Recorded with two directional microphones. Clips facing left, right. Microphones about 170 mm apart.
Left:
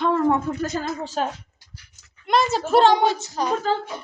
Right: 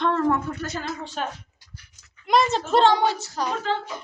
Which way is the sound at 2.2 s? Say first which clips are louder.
Even; centre (ahead or behind).